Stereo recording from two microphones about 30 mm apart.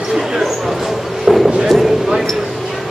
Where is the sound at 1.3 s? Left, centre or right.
Right.